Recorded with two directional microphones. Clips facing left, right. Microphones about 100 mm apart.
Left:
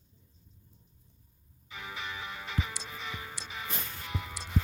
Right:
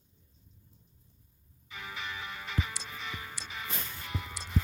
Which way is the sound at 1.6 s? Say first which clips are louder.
Even; 15° left (ahead or behind).